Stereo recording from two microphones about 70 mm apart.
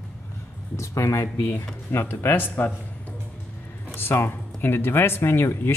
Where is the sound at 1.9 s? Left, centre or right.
Left.